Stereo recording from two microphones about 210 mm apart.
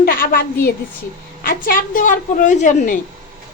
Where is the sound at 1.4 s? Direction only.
40° left (ahead or behind).